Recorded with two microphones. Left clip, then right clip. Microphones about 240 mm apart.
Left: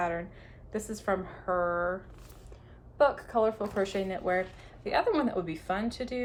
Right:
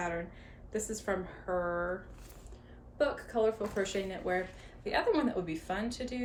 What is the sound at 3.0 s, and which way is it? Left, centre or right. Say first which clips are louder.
A woman's voice: left 5 dB; centre.